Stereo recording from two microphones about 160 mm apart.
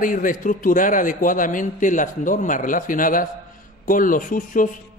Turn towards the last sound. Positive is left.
turn(degrees=60)  # may be behind; listen again after turning